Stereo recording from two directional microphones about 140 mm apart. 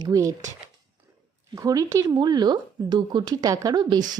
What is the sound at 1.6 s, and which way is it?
Speech, 25° right (ahead or behind).